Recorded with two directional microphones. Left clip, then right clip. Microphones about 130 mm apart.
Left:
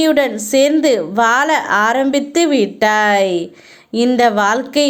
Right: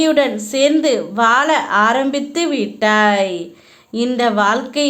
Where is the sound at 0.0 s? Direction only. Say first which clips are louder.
Left 1 dB; 35° left (ahead or behind).